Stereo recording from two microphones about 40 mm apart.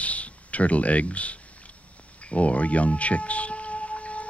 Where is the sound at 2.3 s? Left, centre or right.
Left.